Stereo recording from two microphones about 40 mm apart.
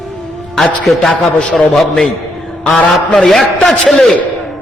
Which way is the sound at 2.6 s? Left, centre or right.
Left.